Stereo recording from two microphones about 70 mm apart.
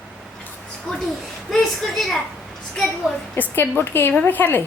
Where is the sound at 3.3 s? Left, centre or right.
Left.